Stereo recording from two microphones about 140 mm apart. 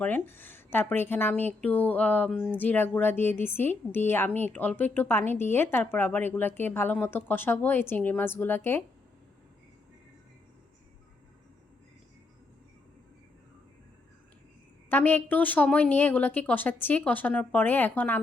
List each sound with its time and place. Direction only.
0.0 s a woman's voice: 15° left (ahead or behind)
14.8 s a woman's voice: 15° left (ahead or behind)